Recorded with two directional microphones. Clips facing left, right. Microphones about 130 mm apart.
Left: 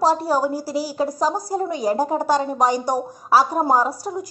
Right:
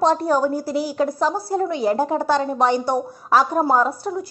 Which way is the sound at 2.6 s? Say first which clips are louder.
Right 1 dB; 10° left (ahead or behind).